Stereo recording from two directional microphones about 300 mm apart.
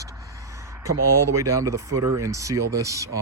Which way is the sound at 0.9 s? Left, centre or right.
Right.